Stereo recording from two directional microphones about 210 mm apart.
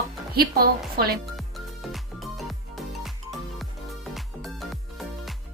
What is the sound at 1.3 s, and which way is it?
Music, centre (ahead or behind).